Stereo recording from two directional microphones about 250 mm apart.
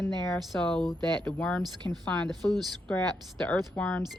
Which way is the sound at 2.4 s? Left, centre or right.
Centre.